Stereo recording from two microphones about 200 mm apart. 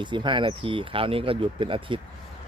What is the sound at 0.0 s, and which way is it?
Speech, 25° right (ahead or behind).